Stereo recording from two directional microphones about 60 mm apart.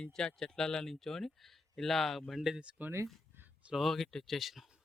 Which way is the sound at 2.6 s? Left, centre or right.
Centre.